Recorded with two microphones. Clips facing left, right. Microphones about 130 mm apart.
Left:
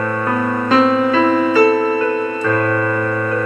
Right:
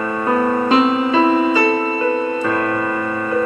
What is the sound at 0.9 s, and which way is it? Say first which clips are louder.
Music: left 1 dB; 20° right (ahead or behind).